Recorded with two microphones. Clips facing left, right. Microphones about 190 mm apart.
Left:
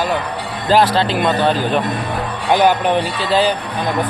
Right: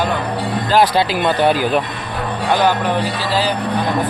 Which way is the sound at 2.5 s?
20° left (ahead or behind).